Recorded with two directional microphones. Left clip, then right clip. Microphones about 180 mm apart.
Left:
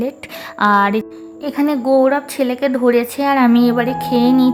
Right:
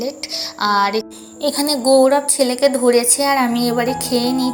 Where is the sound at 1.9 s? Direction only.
35° left (ahead or behind).